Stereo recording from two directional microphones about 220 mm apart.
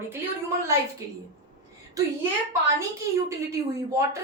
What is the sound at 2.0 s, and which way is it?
Speech, 15° right (ahead or behind).